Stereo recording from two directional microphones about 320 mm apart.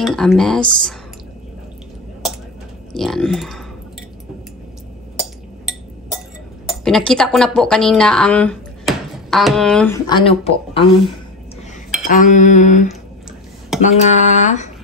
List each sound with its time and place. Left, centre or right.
0.0 s speech: centre
2.9 s speech: centre
5.2 s chink: centre
6.6 s speech: centre
10.0 s a woman's voice: centre